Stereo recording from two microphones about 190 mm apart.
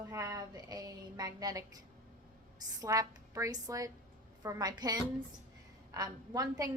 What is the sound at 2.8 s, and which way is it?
A woman's voice, 20° right (ahead or behind).